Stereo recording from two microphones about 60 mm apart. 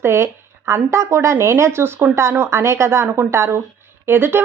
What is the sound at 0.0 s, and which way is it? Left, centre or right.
Speech, right.